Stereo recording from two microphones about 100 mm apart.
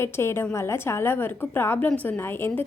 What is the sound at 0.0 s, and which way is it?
A woman's voice, 25° left (ahead or behind).